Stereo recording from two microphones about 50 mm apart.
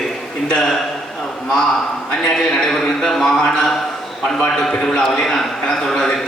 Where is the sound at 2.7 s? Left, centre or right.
Centre.